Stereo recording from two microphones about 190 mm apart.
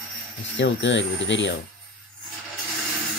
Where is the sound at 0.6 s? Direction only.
75° left (ahead or behind).